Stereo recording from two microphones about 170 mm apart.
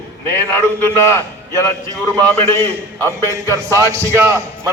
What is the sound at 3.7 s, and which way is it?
A man's voice, 15° right (ahead or behind).